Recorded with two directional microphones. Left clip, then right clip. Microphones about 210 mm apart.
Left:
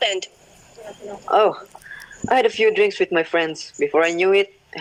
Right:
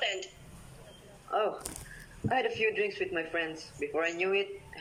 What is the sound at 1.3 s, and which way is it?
Speech, 45° left (ahead or behind).